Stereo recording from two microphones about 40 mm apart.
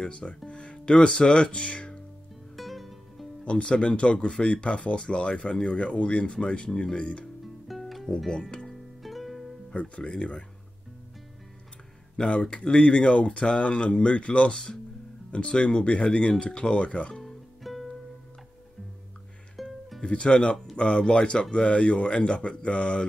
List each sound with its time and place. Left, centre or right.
0.0 s speech: left
2.5 s music: centre
3.4 s speech: left
7.6 s music: centre
8.3 s speech: left
8.6 s music: centre
9.8 s speech: left
12.2 s speech: left
17.2 s music: centre
19.5 s music: centre
20.0 s speech: left